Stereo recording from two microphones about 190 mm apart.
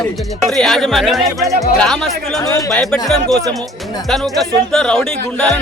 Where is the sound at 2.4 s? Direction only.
15° left (ahead or behind).